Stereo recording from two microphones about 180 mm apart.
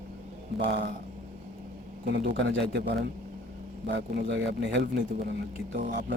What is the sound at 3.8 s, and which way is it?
A man's voice, 70° right (ahead or behind).